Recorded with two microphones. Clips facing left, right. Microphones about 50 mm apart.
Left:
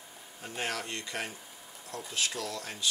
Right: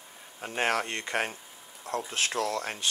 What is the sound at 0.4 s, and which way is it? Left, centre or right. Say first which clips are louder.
Speech: right 7 dB; right.